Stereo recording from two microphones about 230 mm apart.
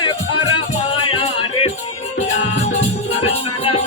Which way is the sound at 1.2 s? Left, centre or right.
Left.